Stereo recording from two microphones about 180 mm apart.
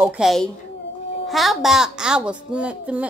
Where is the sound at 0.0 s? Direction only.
Centre (ahead or behind).